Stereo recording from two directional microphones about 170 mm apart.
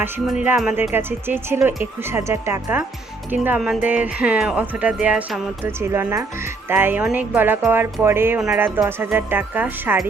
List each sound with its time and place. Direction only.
0.0 s speech: 10° right (ahead or behind)